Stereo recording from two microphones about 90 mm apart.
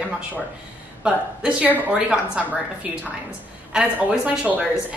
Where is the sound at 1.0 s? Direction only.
10° right (ahead or behind).